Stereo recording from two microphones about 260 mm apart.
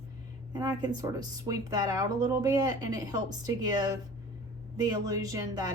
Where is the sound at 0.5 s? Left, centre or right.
Centre.